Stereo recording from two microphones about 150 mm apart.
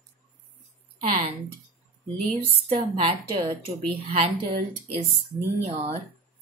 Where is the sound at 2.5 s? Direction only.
35° right (ahead or behind).